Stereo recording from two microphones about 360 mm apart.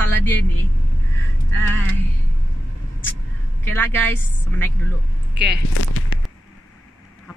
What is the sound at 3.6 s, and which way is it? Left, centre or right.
A man's voice, centre.